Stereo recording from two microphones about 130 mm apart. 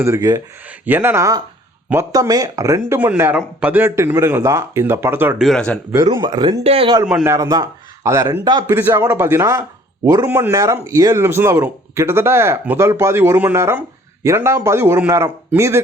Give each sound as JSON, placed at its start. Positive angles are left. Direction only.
{"t": 0.0, "sound": "speech", "side_deg": -20}
{"t": 5.4, "sound": "speech", "side_deg": 5}
{"t": 6.1, "sound": "speech", "side_deg": -30}
{"t": 6.6, "sound": "speech", "side_deg": -50}
{"t": 7.0, "sound": "speech", "side_deg": -10}
{"t": 7.3, "sound": "a man's voice", "side_deg": -25}